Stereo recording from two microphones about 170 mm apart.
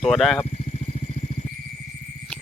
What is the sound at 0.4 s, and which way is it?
Vehicle, 40° left (ahead or behind).